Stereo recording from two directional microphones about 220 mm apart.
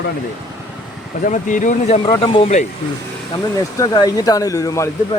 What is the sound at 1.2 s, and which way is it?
Speech, 35° left (ahead or behind).